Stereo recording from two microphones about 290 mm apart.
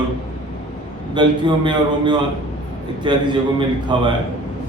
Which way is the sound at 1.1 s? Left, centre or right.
Centre.